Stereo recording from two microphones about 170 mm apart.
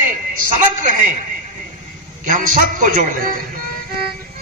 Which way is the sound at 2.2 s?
50° right (ahead or behind).